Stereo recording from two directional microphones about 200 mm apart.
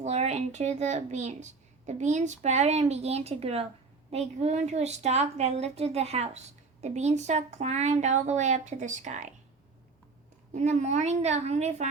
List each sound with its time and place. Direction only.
0.0 s a woman's voice: 35° right (ahead or behind)
10.5 s a woman's voice: 35° right (ahead or behind)